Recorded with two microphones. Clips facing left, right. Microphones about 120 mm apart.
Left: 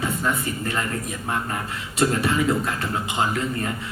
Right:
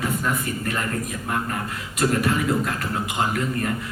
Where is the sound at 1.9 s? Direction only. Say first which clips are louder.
Left 1 dB; 30° left (ahead or behind).